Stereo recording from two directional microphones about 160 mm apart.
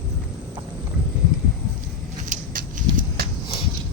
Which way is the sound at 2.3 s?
60° right (ahead or behind).